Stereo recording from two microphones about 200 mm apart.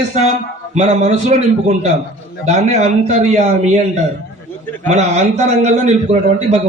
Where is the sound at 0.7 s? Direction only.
35° right (ahead or behind).